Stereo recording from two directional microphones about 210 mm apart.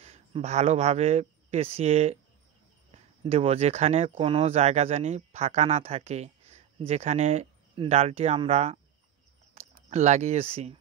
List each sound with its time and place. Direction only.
0.0 s speech: 30° right (ahead or behind)
3.3 s speech: 30° right (ahead or behind)